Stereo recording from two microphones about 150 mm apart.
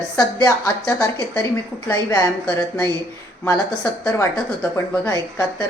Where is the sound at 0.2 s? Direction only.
20° left (ahead or behind).